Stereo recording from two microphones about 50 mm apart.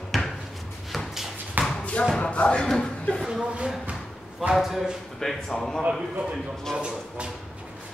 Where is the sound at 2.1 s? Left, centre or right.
Left.